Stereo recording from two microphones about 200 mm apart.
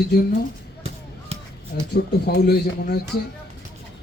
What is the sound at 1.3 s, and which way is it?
Crow, 30° right (ahead or behind).